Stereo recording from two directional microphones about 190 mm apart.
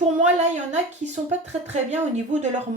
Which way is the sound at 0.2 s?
35° right (ahead or behind).